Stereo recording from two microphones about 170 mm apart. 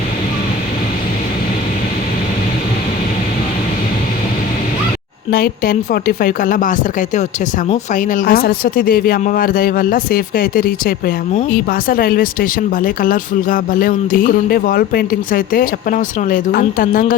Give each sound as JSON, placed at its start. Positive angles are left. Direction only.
{"t": 5.3, "sound": "speech", "side_deg": 60}